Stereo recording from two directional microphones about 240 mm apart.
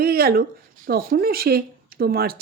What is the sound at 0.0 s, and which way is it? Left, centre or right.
Speech, right.